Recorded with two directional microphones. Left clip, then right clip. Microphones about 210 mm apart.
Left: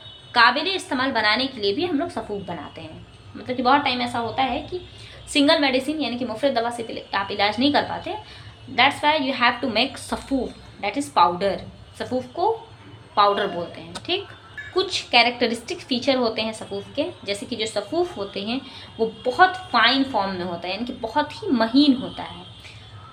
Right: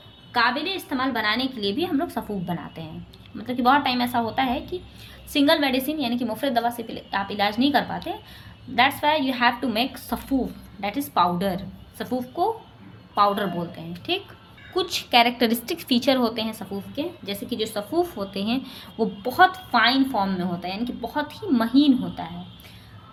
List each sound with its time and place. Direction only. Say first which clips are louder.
0.3 s a woman's voice: left 5 dB; 10° right (ahead or behind); by 4.7 s 35° right (ahead or behind)
5.3 s a woman's voice: left 2 dB; 20° right (ahead or behind)